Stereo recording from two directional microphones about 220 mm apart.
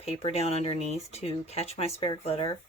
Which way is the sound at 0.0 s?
25° left (ahead or behind).